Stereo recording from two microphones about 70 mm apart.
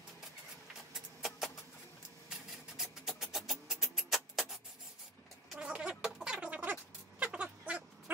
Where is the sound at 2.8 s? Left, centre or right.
Centre.